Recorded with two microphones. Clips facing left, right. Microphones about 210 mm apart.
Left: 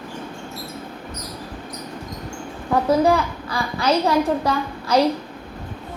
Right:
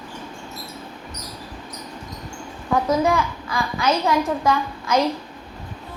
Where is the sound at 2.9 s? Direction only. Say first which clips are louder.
Left 4 dB; 35° left (ahead or behind).